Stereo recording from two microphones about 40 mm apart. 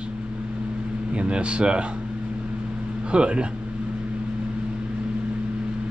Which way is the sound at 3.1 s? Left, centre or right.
Right.